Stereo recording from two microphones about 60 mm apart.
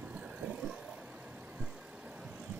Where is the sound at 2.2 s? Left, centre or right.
Right.